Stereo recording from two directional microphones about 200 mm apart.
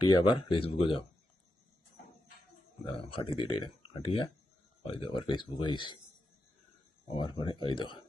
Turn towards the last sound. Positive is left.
turn(degrees=25)  # may be behind; listen again after turning